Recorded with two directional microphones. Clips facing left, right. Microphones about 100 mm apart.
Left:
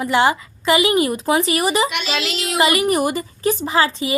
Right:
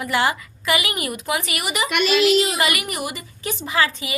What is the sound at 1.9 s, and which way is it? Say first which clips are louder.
Speech: right 4 dB; 55° right (ahead or behind).